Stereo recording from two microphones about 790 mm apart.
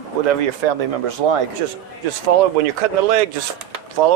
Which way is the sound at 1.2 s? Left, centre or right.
Right.